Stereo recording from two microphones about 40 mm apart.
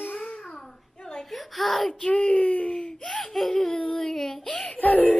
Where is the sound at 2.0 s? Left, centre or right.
Left.